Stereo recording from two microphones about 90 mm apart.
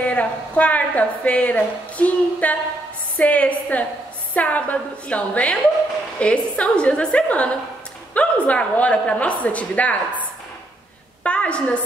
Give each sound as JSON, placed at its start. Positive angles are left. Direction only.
{"t": 0.0, "sound": "a woman's voice", "side_deg": 15}
{"t": 11.2, "sound": "a woman's voice", "side_deg": 15}